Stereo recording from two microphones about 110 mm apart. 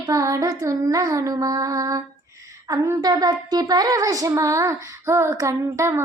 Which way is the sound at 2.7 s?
30° right (ahead or behind).